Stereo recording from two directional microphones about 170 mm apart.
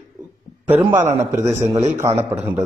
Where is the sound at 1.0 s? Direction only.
15° right (ahead or behind).